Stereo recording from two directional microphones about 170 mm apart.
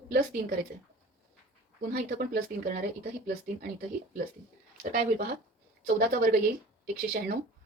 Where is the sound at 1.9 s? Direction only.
60° right (ahead or behind).